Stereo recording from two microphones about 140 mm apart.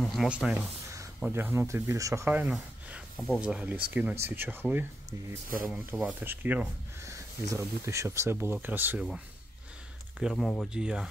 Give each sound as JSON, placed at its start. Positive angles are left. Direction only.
{"t": 0.0, "sound": "speech", "side_deg": 0}
{"t": 2.5, "sound": "a sound", "side_deg": 0}
{"t": 3.3, "sound": "speech", "side_deg": -10}
{"t": 5.9, "sound": "speech", "side_deg": 0}
{"t": 6.2, "sound": "speech", "side_deg": -15}
{"t": 10.1, "sound": "speech", "side_deg": 0}